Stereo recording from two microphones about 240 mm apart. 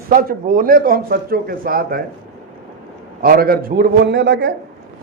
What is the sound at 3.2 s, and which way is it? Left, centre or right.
A man's voice, right.